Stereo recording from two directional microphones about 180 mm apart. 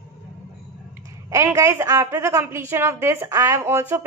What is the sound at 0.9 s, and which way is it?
A woman's voice, 15° right (ahead or behind).